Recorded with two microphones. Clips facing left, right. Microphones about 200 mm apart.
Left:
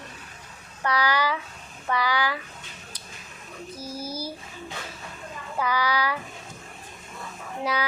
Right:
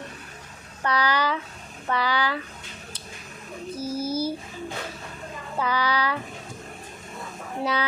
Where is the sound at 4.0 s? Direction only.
10° left (ahead or behind).